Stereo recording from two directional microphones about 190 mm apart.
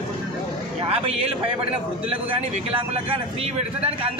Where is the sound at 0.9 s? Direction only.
30° right (ahead or behind).